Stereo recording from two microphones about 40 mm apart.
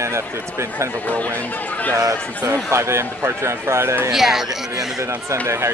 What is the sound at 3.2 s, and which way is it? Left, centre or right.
Speech, right.